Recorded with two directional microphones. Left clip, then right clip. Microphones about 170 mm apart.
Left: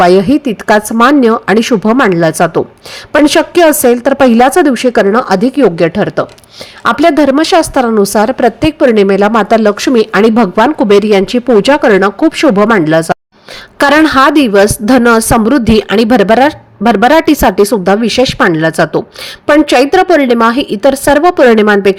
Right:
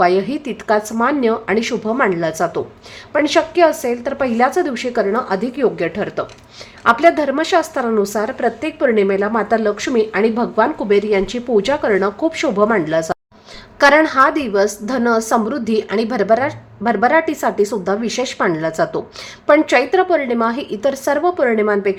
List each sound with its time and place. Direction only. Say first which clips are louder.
0.0 s a woman's voice: left 9 dB; 40° left (ahead or behind)